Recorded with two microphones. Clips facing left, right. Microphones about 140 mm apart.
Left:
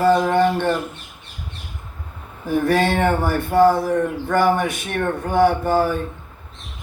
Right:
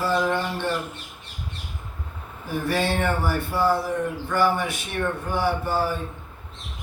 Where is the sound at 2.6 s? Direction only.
55° left (ahead or behind).